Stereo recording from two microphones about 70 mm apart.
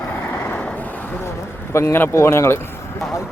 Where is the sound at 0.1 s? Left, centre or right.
Left.